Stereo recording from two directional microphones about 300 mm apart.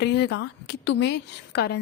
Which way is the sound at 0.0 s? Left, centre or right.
Left.